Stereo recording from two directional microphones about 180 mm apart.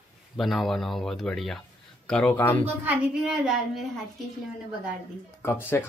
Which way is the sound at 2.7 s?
5° right (ahead or behind).